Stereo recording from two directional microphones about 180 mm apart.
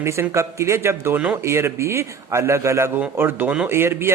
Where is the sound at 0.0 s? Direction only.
15° right (ahead or behind).